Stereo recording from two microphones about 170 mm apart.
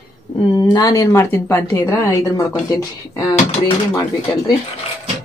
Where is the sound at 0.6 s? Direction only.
25° left (ahead or behind).